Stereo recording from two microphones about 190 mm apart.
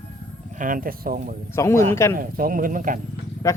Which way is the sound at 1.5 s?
15° left (ahead or behind).